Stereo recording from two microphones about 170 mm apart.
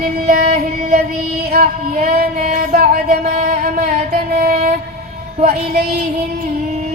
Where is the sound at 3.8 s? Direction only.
65° right (ahead or behind).